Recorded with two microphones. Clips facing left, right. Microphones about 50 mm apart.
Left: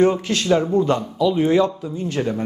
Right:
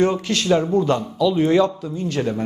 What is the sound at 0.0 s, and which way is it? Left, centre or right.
Speech, left.